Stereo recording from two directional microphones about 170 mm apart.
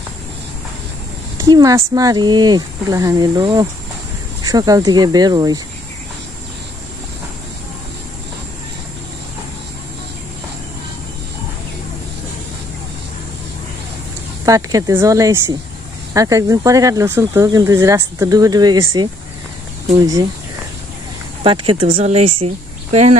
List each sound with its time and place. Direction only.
1.4 s speech: 20° right (ahead or behind)
14.4 s speech: 20° right (ahead or behind)
21.4 s speech: 30° right (ahead or behind)